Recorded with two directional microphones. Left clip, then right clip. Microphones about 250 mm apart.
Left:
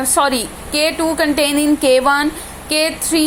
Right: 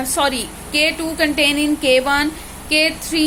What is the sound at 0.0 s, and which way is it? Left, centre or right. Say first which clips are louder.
Speech: left 3 dB; centre.